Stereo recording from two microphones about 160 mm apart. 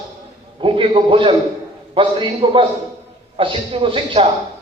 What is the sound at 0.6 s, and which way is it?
A man's voice, 35° right (ahead or behind).